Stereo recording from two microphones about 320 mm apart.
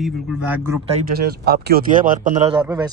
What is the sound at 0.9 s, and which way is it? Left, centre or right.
A man's voice, right.